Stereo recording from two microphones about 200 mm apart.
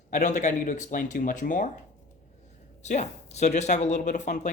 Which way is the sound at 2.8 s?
35° left (ahead or behind).